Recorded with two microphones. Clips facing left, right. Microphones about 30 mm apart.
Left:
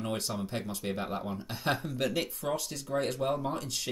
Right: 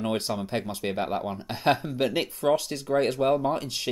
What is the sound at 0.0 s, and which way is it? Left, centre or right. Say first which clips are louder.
Speech: right 6 dB; right.